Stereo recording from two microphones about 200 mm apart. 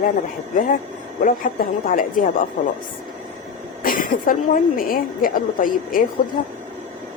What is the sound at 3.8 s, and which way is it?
A woman's voice, 45° left (ahead or behind).